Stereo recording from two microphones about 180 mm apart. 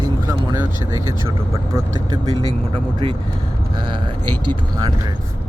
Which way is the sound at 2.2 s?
25° right (ahead or behind).